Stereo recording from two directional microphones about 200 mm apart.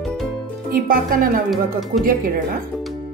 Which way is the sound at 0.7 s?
45° right (ahead or behind).